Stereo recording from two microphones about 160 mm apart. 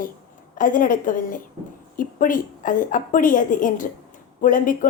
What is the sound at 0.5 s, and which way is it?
A woman's voice, 55° left (ahead or behind).